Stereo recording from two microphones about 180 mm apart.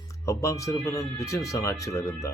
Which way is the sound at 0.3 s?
15° left (ahead or behind).